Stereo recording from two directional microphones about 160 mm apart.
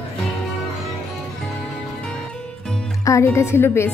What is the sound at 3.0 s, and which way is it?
Speech, 20° left (ahead or behind).